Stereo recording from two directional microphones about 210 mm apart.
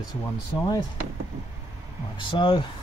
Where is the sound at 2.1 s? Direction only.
25° left (ahead or behind).